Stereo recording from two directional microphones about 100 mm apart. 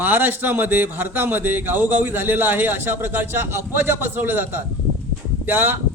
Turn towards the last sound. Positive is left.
turn(degrees=-20)  # may be behind; listen again after turning